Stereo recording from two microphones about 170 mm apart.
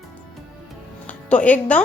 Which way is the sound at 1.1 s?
10° left (ahead or behind).